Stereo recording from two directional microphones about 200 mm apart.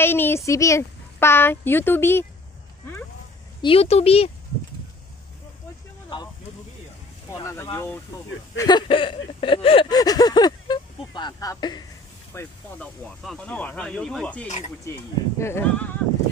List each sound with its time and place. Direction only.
0.0 s a sound: 10° left (ahead or behind)
0.5 s speech: 15° left (ahead or behind)
3.6 s speech: 30° left (ahead or behind)
7.3 s speech: 15° left (ahead or behind)
12.4 s speech: 5° left (ahead or behind)